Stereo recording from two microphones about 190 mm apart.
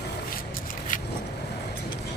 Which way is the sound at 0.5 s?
45° left (ahead or behind).